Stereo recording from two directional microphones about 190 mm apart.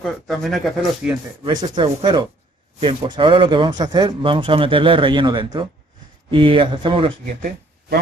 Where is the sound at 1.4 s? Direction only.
25° right (ahead or behind).